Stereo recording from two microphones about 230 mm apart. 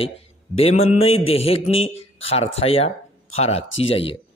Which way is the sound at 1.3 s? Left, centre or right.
Left.